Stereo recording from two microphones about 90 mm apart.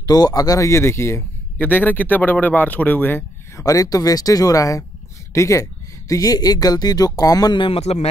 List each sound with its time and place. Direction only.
0.0 s a man's voice: 45° left (ahead or behind); by 3.6 s 25° left (ahead or behind)
3.6 s speech: 40° left (ahead or behind)
7.5 s a man's voice: 75° left (ahead or behind)